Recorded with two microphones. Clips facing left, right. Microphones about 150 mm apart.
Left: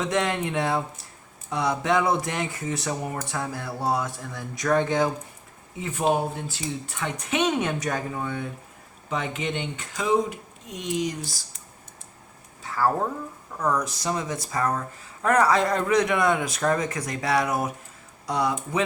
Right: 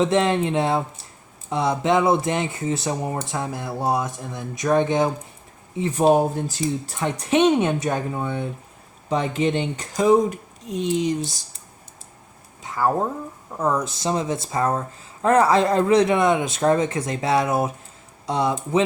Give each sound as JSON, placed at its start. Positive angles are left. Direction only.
{"t": 0.0, "sound": "speech", "side_deg": -25}
{"t": 5.8, "sound": "a woman's voice", "side_deg": -35}
{"t": 9.0, "sound": "a woman's voice", "side_deg": -35}
{"t": 12.6, "sound": "speech", "side_deg": -20}